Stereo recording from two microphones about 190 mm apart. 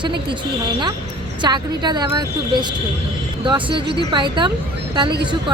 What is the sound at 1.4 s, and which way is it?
Speech, 25° right (ahead or behind).